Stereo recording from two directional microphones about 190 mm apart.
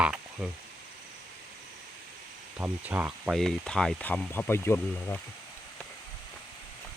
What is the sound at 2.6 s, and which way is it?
Speech, 5° right (ahead or behind).